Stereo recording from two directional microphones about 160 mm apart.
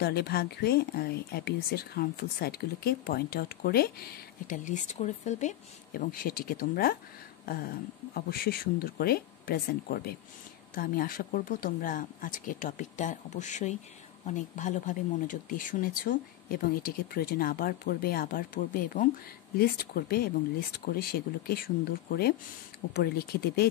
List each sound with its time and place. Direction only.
0.0 s speech: 80° left; by 5.6 s 45° left (ahead or behind)
5.9 s speech: 65° left (ahead or behind)
22.9 s speech: 75° left (ahead or behind)